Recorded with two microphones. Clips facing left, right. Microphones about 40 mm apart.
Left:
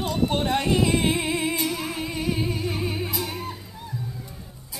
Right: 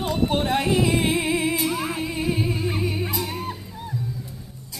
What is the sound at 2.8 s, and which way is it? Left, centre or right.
Music, centre.